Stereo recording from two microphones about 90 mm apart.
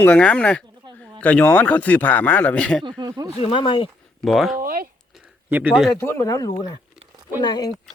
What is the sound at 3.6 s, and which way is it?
Speech, 65° left (ahead or behind).